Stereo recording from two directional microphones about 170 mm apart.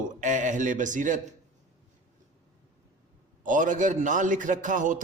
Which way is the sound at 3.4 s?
50° right (ahead or behind).